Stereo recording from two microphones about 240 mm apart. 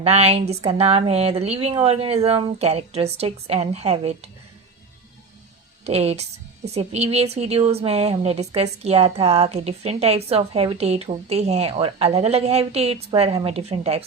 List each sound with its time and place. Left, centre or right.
0.0 s a woman's voice: right
5.8 s a woman's voice: right